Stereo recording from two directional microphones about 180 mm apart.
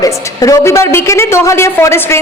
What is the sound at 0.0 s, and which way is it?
A woman's voice, 20° left (ahead or behind).